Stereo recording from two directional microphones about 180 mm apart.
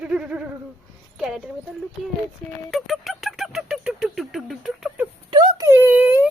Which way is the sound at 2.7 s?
Centre (ahead or behind).